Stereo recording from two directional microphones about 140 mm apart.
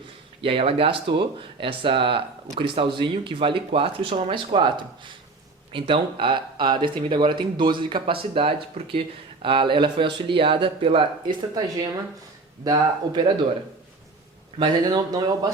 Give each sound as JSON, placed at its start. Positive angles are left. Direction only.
{"t": 0.4, "sound": "speech", "side_deg": -40}
{"t": 12.6, "sound": "speech", "side_deg": -30}
{"t": 14.6, "sound": "speech", "side_deg": -30}